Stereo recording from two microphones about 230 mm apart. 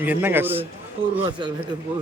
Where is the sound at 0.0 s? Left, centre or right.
Centre.